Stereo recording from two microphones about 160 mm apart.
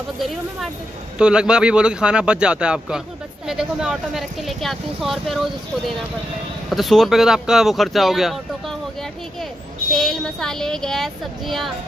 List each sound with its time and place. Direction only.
1.1 s speech: 5° right (ahead or behind)
6.7 s speech: centre (ahead or behind)
9.9 s speech: centre (ahead or behind)